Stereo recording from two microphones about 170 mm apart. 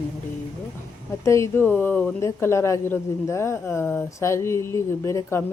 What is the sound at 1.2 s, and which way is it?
Speech, 15° left (ahead or behind).